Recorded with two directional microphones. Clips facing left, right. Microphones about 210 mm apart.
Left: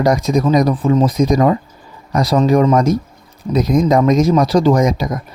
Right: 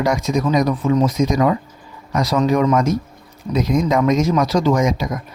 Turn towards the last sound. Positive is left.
turn(degrees=35)  # may be behind; listen again after turning